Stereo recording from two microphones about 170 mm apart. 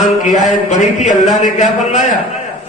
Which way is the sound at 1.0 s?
45° left (ahead or behind).